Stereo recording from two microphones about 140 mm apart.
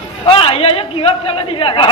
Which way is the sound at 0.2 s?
40° left (ahead or behind).